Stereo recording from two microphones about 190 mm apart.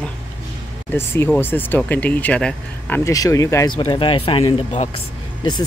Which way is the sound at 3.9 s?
30° left (ahead or behind).